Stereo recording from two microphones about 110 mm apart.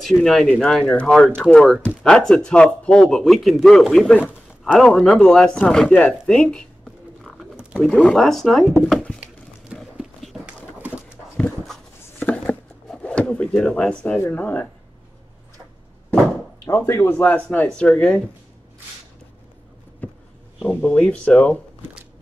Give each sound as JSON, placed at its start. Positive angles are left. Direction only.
{"t": 0.0, "sound": "speech", "side_deg": 0}
{"t": 7.2, "sound": "bird", "side_deg": -10}
{"t": 7.8, "sound": "speech", "side_deg": 0}
{"t": 9.9, "sound": "a sound", "side_deg": -5}
{"t": 12.2, "sound": "a sound", "side_deg": 10}
{"t": 14.2, "sound": "speech", "side_deg": 15}
{"t": 16.6, "sound": "speech", "side_deg": 25}
{"t": 20.0, "sound": "a sound", "side_deg": 15}
{"t": 20.6, "sound": "speech", "side_deg": 15}